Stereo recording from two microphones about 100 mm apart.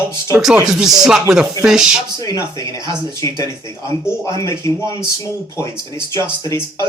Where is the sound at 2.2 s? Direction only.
35° left (ahead or behind).